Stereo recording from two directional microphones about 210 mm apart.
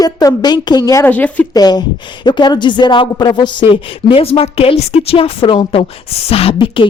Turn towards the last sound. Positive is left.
turn(degrees=25)  # may be behind; listen again after turning